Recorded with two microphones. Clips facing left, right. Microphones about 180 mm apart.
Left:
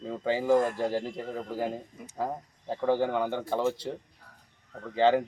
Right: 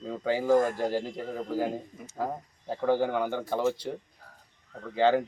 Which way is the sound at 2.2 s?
Centre (ahead or behind).